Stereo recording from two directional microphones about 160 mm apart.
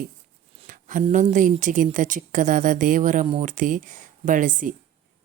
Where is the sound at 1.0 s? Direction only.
50° right (ahead or behind).